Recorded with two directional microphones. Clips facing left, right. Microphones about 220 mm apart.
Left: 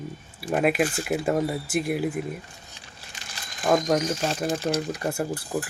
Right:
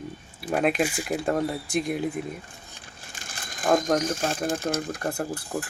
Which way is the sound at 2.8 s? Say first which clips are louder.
Right 1 dB; 50° right (ahead or behind).